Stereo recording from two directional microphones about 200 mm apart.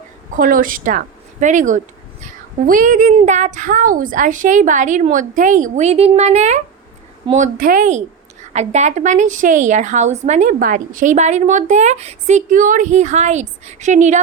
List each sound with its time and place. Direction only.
0.3 s a woman's voice: 45° right (ahead or behind)